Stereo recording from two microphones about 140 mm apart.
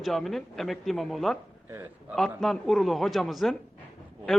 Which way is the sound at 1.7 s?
15° right (ahead or behind).